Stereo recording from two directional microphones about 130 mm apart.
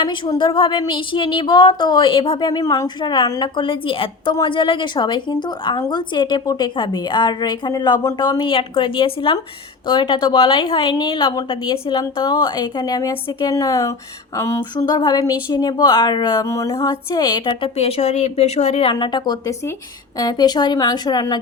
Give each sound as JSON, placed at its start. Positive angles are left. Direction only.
{"t": 0.3, "sound": "a woman's voice", "side_deg": 35}
{"t": 16.5, "sound": "a sound", "side_deg": 25}
{"t": 17.7, "sound": "a woman's voice", "side_deg": 50}